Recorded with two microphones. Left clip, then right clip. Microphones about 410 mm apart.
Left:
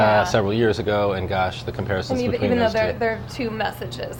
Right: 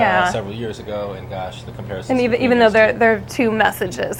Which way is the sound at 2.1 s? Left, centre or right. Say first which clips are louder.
Right 8 dB; right.